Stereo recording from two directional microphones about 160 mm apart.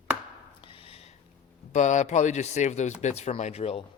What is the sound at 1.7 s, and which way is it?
A man's voice, 50° left (ahead or behind).